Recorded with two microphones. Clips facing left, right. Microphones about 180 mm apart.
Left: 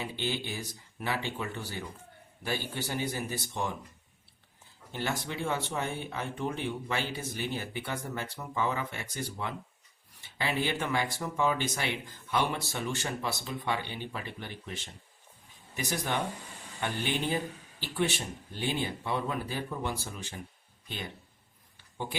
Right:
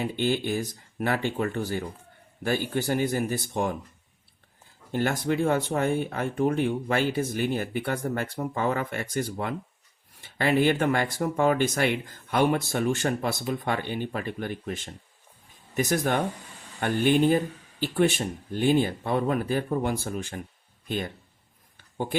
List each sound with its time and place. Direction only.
0.0 s speech: 50° right (ahead or behind)
4.9 s speech: 50° right (ahead or behind)
18.5 s speech: 50° right (ahead or behind)